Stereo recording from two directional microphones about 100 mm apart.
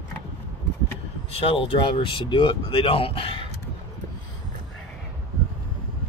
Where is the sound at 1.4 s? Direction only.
65° left (ahead or behind).